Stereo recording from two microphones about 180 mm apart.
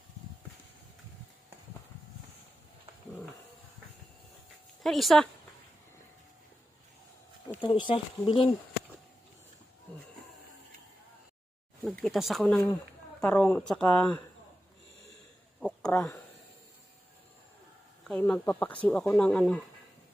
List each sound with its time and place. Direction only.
4.8 s speech: centre (ahead or behind)
7.5 s speech: 25° left (ahead or behind)
12.0 s speech: centre (ahead or behind)
15.6 s a sound: 5° left (ahead or behind)
18.0 s speech: 5° left (ahead or behind)